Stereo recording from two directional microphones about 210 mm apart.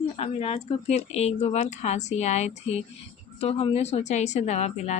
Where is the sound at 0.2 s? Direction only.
30° left (ahead or behind).